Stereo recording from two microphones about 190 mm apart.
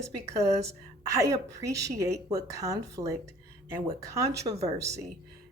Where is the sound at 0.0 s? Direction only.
15° right (ahead or behind).